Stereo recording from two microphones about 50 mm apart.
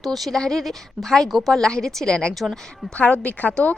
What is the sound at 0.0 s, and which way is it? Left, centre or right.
Speech, centre.